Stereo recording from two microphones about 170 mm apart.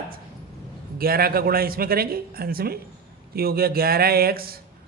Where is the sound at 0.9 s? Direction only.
60° right (ahead or behind).